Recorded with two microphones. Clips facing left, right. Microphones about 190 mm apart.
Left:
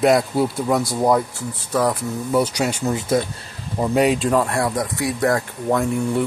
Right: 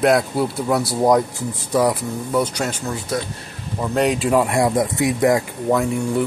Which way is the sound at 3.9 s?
5° left (ahead or behind).